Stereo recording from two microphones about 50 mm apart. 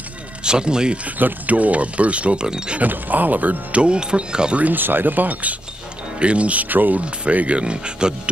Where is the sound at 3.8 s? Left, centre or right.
Centre.